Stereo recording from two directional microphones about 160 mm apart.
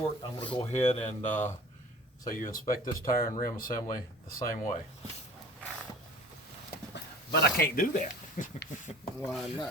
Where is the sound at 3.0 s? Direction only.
65° left (ahead or behind).